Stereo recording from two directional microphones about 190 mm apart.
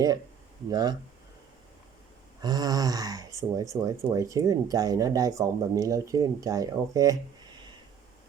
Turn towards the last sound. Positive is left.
turn(degrees=-20)  # may be behind; listen again after turning